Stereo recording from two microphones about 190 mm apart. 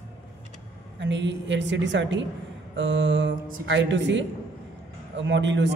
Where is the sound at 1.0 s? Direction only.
70° right (ahead or behind).